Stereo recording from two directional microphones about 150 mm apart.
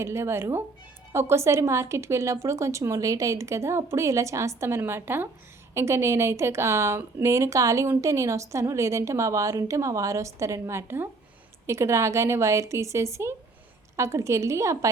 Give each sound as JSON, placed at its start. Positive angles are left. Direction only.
{"t": 0.0, "sound": "a woman's voice", "side_deg": -20}